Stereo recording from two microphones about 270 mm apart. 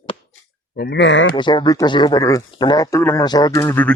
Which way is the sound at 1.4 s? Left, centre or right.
Centre.